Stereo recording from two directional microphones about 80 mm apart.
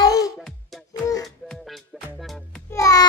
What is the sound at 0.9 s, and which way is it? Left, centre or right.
Music, left.